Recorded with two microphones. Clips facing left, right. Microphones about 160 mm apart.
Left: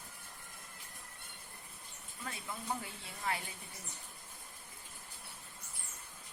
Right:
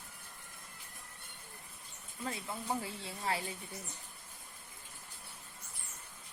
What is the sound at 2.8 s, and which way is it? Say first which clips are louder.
Speech: right 5 dB; 30° right (ahead or behind).